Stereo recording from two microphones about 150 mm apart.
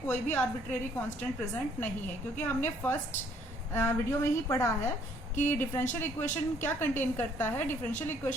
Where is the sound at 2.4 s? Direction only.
15° left (ahead or behind).